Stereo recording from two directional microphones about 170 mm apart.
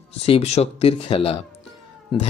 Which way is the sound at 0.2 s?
35° left (ahead or behind).